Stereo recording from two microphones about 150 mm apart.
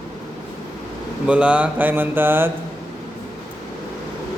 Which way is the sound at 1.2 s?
10° right (ahead or behind).